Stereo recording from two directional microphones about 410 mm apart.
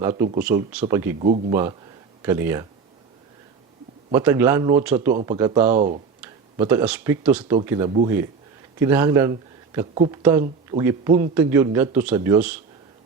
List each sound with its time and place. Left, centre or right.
0.2 s a man's voice: centre
4.1 s a man's voice: centre
6.2 s a man's voice: centre